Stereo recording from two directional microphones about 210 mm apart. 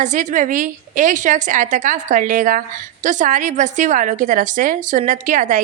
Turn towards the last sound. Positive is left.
turn(degrees=-40)  # may be behind; listen again after turning